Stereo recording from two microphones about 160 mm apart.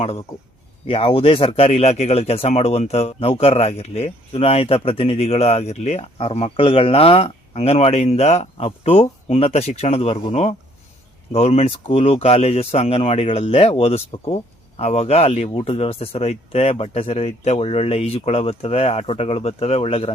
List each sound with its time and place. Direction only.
0.9 s speech: 35° left (ahead or behind)